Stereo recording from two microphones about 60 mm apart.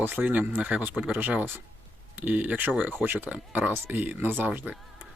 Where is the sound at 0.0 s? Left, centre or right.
Right.